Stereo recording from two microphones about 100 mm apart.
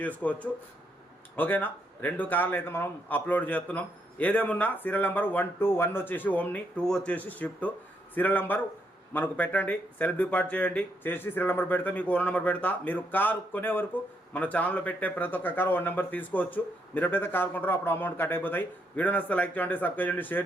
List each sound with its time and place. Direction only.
0.2 s a man's voice: 15° left (ahead or behind)